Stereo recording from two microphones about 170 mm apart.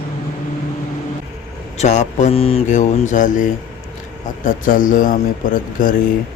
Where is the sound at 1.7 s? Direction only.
45° left (ahead or behind).